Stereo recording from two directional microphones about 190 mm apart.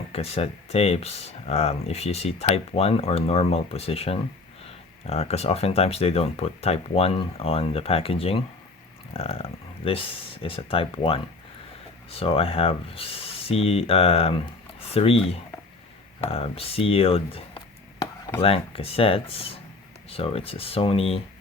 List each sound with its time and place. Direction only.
0.1 s speech: 30° left (ahead or behind)